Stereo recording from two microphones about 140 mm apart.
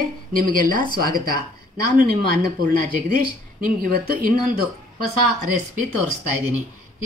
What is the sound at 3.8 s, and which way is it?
Speech, 90° right.